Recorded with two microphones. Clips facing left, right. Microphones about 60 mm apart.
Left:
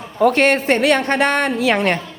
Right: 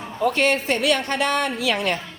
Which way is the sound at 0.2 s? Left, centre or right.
Left.